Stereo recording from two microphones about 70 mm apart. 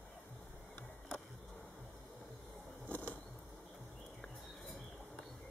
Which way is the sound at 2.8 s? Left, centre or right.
Left.